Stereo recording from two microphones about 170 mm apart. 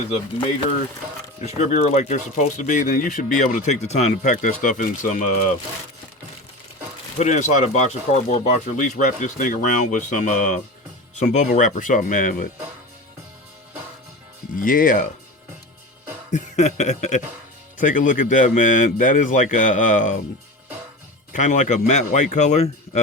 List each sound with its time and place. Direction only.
1.4 s speech: 40° left (ahead or behind)
7.2 s speech: 45° left (ahead or behind)
14.5 s speech: 55° left (ahead or behind)
16.3 s speech: 45° left (ahead or behind)
21.3 s speech: 45° left (ahead or behind)